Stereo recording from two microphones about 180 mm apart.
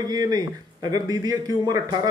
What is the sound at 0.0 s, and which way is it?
A man's voice, 20° right (ahead or behind).